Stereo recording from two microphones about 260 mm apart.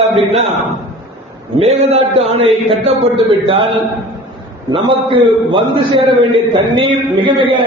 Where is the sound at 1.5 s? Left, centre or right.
Right.